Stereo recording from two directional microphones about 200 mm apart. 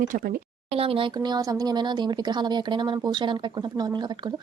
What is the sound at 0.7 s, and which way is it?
Speech, 30° right (ahead or behind).